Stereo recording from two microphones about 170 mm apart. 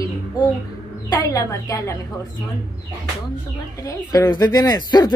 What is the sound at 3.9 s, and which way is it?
Speech, 20° left (ahead or behind).